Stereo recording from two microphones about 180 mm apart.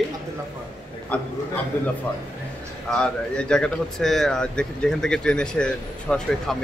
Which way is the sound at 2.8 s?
5° left (ahead or behind).